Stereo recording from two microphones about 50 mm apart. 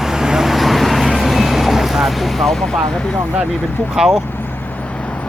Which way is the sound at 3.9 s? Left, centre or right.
Centre.